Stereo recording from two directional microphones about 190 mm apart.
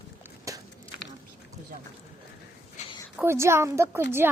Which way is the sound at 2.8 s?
35° left (ahead or behind).